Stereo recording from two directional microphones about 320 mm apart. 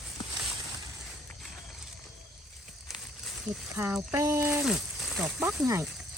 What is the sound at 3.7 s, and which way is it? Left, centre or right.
Speech, centre.